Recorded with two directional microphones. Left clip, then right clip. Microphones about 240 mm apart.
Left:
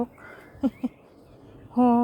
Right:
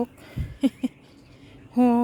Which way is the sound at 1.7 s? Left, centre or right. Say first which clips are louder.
Even; right.